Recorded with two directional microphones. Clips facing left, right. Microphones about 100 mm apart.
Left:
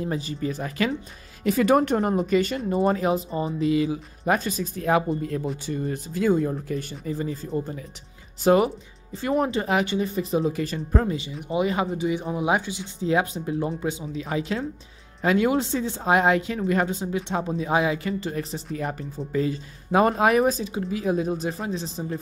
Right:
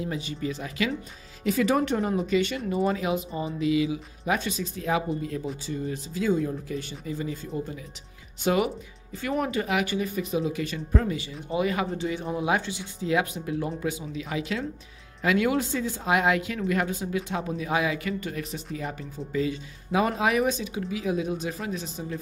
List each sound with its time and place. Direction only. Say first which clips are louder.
0.0 s speech: left 3 dB; 40° left (ahead or behind)
11.4 s speech: left 2 dB; 25° left (ahead or behind)
11.9 s speech: left 3 dB; 15° left (ahead or behind)
13.0 s speech: left 3 dB; 30° left (ahead or behind)
18.8 s speech: left 6 dB; 45° left (ahead or behind)